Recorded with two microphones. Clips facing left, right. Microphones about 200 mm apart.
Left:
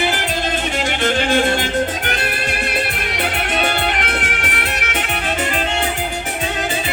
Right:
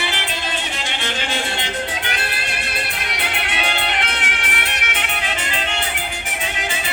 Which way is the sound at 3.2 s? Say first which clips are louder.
Left 6 dB; 45° left (ahead or behind).